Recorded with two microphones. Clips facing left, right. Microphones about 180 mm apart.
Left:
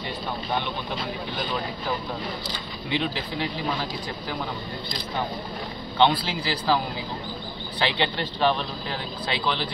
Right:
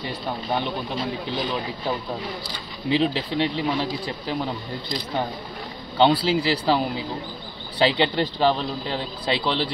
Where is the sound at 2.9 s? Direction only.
30° right (ahead or behind).